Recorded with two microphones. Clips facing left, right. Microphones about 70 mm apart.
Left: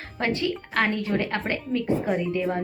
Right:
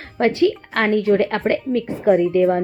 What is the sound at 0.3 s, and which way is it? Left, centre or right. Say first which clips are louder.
A woman's voice: right 7 dB; right.